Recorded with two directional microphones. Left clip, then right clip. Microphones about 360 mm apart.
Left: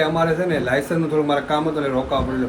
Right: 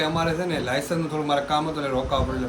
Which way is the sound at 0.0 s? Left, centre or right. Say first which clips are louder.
Left 5 dB; centre.